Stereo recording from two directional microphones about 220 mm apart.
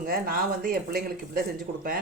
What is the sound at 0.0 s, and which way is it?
Speech, 40° right (ahead or behind).